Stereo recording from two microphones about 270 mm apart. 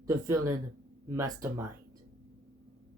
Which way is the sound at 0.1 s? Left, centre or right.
Centre.